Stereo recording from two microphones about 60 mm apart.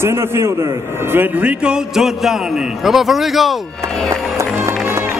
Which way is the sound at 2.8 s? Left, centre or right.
Centre.